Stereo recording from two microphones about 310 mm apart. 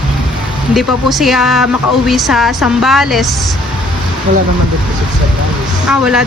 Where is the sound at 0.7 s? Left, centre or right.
Centre.